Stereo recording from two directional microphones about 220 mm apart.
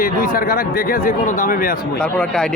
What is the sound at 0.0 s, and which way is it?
Speech, 40° left (ahead or behind).